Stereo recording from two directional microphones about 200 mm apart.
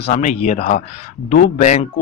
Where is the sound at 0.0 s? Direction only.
35° left (ahead or behind).